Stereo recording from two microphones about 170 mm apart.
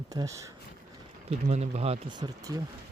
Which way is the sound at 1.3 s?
40° right (ahead or behind).